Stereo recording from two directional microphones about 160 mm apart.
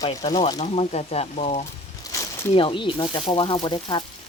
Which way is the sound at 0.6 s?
40° left (ahead or behind).